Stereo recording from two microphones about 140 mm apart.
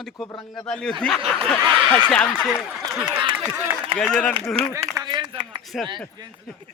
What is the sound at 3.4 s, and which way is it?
Speech, 15° right (ahead or behind).